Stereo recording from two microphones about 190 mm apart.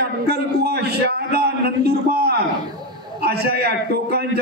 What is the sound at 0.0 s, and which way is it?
A man's voice, 55° right (ahead or behind).